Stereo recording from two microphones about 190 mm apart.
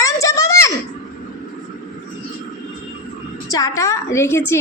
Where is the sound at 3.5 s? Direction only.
20° left (ahead or behind).